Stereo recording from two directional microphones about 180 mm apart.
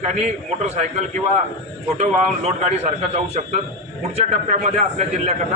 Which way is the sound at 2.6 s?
40° right (ahead or behind).